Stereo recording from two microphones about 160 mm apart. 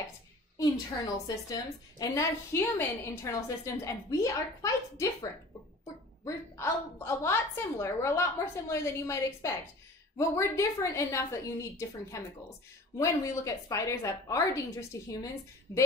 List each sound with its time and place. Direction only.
1.1 s a woman's voice: 25° left (ahead or behind)